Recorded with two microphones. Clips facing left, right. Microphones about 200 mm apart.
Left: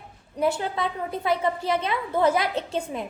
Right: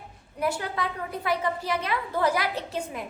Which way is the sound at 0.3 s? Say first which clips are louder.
Left 4 dB; 25° left (ahead or behind).